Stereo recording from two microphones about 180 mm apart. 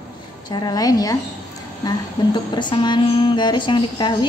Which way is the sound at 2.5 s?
25° left (ahead or behind).